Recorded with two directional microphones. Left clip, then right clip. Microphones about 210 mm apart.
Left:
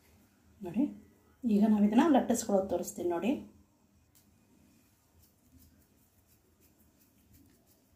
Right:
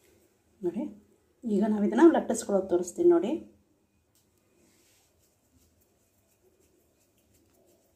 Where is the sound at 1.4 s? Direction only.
25° right (ahead or behind).